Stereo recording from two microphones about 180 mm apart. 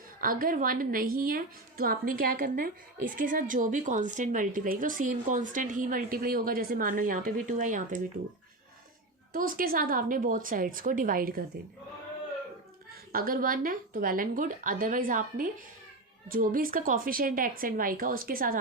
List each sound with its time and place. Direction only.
0.2 s a woman's voice: 50° right (ahead or behind)
9.3 s a woman's voice: 50° right (ahead or behind)
12.9 s a woman's voice: 55° right (ahead or behind)